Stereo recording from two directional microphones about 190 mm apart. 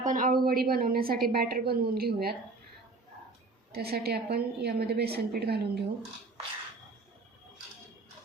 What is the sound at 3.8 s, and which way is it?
A woman's voice, 55° right (ahead or behind).